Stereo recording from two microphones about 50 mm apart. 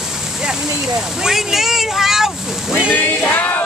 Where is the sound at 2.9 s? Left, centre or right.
Left.